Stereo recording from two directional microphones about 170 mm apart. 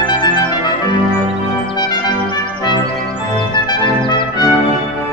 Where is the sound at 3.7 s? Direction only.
25° left (ahead or behind).